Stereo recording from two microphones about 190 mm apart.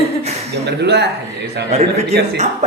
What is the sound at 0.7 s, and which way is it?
Speech, 60° right (ahead or behind).